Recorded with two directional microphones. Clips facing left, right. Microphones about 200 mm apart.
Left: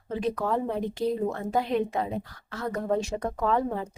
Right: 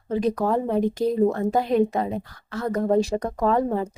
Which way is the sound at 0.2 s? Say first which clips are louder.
Right 4 dB; 40° right (ahead or behind).